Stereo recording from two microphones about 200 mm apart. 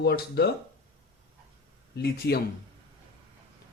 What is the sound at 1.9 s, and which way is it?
Speech, 55° left (ahead or behind).